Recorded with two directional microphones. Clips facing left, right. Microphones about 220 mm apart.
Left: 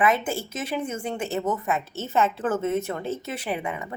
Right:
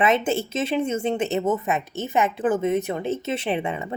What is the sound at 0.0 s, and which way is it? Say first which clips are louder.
Speech: right 3 dB; 25° right (ahead or behind).